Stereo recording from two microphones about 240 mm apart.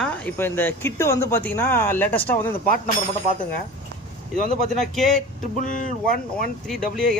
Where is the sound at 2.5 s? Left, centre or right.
Left.